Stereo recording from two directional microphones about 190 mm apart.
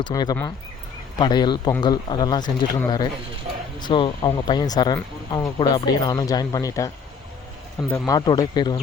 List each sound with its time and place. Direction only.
0.0 s speech: 20° left (ahead or behind)